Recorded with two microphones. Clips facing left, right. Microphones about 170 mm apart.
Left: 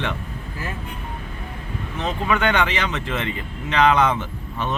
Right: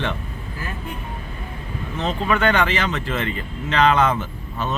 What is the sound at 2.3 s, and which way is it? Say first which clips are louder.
Speech: right 1 dB; 15° left (ahead or behind).